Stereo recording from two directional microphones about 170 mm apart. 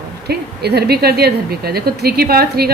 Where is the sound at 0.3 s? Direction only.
70° right (ahead or behind).